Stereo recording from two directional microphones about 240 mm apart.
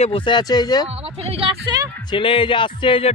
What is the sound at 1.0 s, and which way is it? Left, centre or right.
Speech, right.